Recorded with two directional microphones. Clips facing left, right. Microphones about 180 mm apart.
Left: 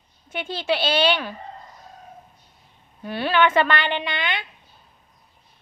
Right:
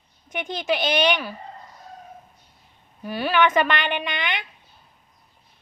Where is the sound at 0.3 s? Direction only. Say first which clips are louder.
Even; 15° right (ahead or behind).